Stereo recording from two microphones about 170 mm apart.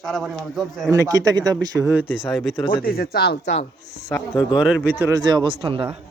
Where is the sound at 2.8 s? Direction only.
60° left (ahead or behind); by 3.6 s 75° left (ahead or behind).